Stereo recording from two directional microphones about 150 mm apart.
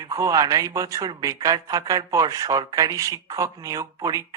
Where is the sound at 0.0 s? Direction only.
25° right (ahead or behind).